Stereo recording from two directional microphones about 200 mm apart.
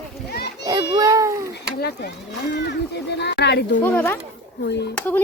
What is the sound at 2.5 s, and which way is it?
Speech, 55° left (ahead or behind).